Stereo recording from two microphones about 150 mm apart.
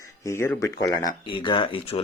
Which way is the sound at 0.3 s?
15° left (ahead or behind).